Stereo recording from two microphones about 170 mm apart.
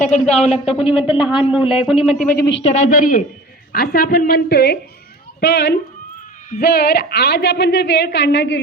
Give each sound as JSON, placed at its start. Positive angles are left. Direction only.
{"t": 0.1, "sound": "speech", "side_deg": 40}
{"t": 0.6, "sound": "speech", "side_deg": 0}
{"t": 2.6, "sound": "a woman's voice", "side_deg": 45}
{"t": 3.7, "sound": "a woman's voice", "side_deg": 60}
{"t": 5.4, "sound": "a woman's voice", "side_deg": 85}
{"t": 6.5, "sound": "a woman's voice", "side_deg": 70}